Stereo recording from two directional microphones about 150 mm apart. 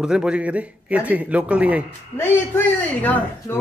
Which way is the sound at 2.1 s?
15° left (ahead or behind).